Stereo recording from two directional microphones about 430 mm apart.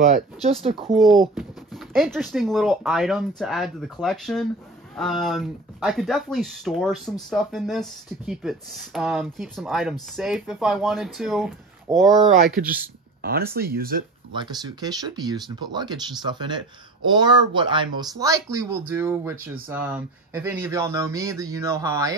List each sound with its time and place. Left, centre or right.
0.0 s speech: centre
0.9 s speech: centre
13.2 s speech: right